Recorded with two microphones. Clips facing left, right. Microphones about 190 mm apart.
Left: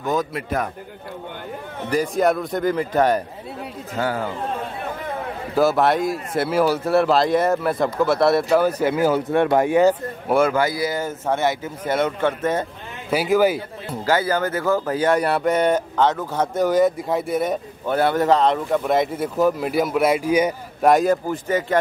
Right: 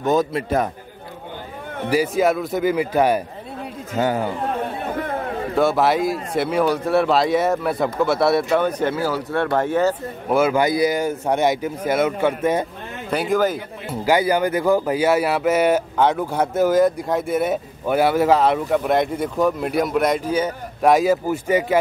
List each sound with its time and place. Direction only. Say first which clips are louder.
0.0 s a man's voice: right 4 dB; 25° right (ahead or behind)
1.9 s speech: right 1 dB; 5° right (ahead or behind)
3.9 s a man's voice: right 3 dB; 20° right (ahead or behind)
5.5 s speech: even; centre (ahead or behind)
10.5 s speech: right 3 dB; 20° right (ahead or behind)
13.1 s speech: left 2 dB; 5° left (ahead or behind)
14.0 s speech: right 3 dB; 15° right (ahead or behind); by 20.5 s 10° left (ahead or behind)
20.8 s speech: even; centre (ahead or behind)